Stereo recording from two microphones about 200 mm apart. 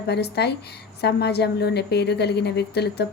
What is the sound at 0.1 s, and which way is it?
A woman's voice, 55° left (ahead or behind).